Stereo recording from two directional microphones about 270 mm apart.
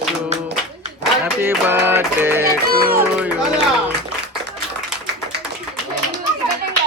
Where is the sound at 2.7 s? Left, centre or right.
Right.